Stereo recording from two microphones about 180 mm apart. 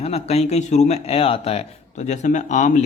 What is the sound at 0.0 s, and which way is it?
Speech, 35° left (ahead or behind).